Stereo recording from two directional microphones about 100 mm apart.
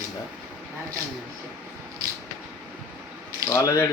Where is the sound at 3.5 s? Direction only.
30° left (ahead or behind).